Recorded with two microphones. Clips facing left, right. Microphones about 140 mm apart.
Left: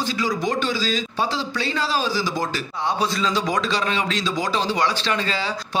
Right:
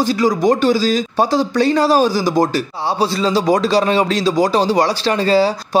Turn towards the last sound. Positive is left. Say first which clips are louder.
# right 12 dB
turn(degrees=-40)  # may be behind; listen again after turning